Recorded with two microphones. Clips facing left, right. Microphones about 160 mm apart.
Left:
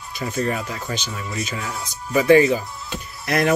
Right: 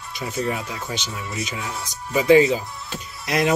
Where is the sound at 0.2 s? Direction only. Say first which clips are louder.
Left 2 dB; 10° right (ahead or behind).